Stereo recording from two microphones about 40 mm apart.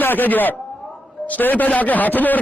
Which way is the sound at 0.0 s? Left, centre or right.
Left.